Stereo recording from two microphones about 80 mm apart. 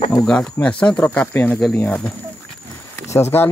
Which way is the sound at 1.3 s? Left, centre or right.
Left.